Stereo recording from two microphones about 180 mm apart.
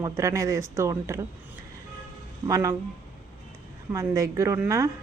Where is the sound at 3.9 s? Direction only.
20° right (ahead or behind).